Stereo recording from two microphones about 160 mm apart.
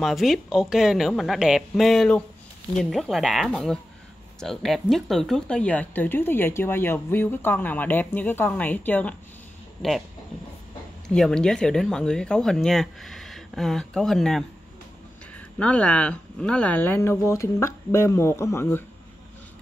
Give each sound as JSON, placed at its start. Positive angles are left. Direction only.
{"t": 0.0, "sound": "speech", "side_deg": 0}
{"t": 9.8, "sound": "speech", "side_deg": 0}
{"t": 11.1, "sound": "speech", "side_deg": 5}